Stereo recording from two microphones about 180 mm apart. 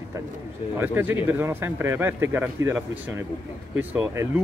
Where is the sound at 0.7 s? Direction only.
10° right (ahead or behind).